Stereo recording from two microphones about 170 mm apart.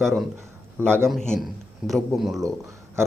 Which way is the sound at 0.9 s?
15° right (ahead or behind).